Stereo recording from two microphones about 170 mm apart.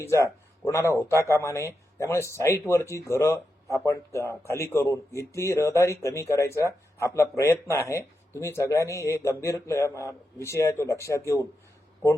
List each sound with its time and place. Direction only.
0.0 s speech: 15° left (ahead or behind)